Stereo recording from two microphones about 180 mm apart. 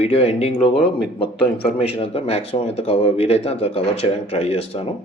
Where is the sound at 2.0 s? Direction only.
35° left (ahead or behind).